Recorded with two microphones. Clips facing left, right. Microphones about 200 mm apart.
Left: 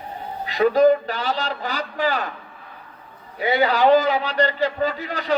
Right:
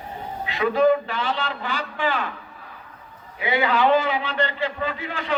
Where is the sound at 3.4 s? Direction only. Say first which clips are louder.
Left 2 dB; 40° left (ahead or behind).